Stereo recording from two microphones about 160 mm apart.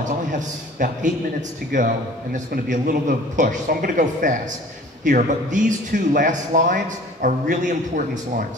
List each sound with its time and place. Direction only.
0.0 s a man's voice: 55° right (ahead or behind)